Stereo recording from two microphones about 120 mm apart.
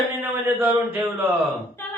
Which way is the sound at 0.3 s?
15° right (ahead or behind).